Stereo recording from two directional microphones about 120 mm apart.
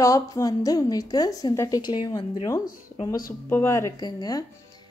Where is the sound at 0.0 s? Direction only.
30° left (ahead or behind).